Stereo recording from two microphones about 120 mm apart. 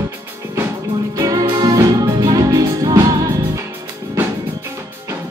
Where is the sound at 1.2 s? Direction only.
30° right (ahead or behind).